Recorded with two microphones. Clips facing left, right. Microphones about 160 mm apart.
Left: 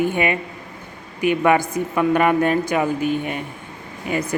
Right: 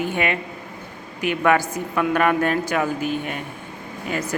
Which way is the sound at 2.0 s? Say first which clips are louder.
Left 2 dB; 10° left (ahead or behind).